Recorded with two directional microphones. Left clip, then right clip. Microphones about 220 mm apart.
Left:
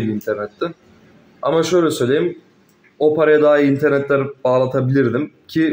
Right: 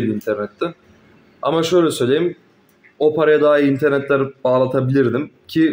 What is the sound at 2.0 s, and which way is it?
Speech, 10° right (ahead or behind).